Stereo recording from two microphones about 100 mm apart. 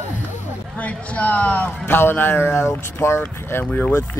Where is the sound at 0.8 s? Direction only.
15° left (ahead or behind).